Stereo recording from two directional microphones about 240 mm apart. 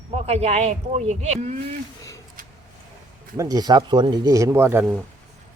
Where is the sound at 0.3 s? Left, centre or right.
Right.